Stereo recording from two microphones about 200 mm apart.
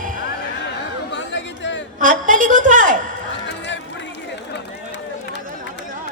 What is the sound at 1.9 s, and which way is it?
A woman's voice, 40° right (ahead or behind).